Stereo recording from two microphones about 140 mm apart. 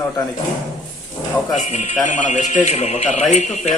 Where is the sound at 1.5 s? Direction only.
55° left (ahead or behind).